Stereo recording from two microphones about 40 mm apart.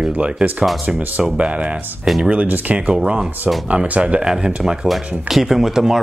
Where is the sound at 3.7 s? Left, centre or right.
Right.